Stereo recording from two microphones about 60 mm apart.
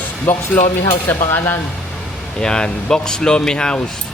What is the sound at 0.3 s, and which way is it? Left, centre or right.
Speech, left.